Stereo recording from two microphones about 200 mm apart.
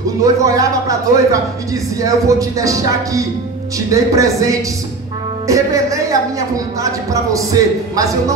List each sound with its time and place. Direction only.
0.2 s a man's voice: 15° right (ahead or behind)